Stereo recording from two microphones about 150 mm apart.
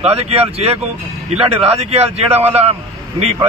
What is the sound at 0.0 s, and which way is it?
Speech, 40° right (ahead or behind).